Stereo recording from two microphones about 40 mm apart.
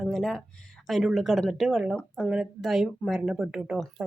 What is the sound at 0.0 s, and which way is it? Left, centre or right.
Speech, centre.